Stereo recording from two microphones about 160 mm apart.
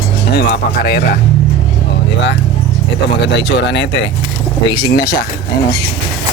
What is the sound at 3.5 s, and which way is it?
Speech, 90° left.